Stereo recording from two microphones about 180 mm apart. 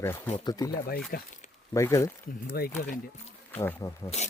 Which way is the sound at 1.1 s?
55° left (ahead or behind).